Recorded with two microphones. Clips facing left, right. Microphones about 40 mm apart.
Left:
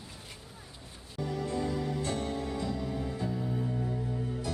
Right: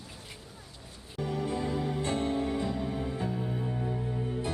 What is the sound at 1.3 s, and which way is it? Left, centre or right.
Music, right.